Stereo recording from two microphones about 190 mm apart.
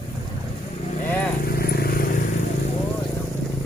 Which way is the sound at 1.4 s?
55° left (ahead or behind).